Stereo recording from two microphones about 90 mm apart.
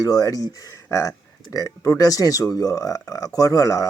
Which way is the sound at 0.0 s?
45° left (ahead or behind).